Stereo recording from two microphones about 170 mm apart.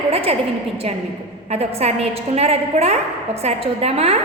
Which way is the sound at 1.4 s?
35° right (ahead or behind).